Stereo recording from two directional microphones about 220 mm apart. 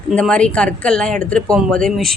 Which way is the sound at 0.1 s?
5° left (ahead or behind).